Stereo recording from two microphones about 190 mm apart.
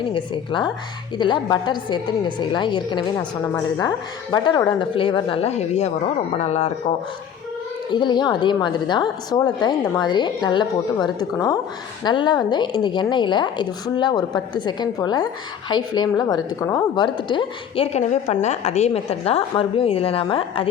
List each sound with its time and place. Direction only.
0.1 s a woman's voice: 25° left (ahead or behind)
7.9 s a woman's voice: 25° left (ahead or behind)